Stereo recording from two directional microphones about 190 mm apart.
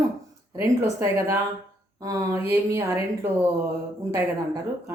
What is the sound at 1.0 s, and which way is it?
Speech, 10° right (ahead or behind).